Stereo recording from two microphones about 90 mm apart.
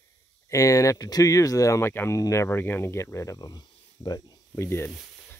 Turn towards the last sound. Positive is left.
turn(degrees=25)  # may be behind; listen again after turning